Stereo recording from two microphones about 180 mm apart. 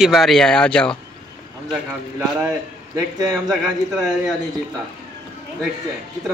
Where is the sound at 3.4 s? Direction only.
Centre (ahead or behind).